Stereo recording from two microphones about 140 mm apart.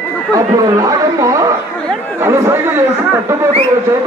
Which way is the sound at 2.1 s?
20° right (ahead or behind).